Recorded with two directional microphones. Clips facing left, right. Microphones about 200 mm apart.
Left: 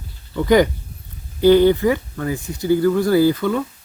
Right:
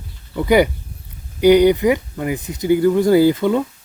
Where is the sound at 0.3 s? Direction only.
10° right (ahead or behind).